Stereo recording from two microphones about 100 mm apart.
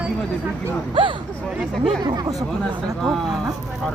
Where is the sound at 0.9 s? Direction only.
55° right (ahead or behind).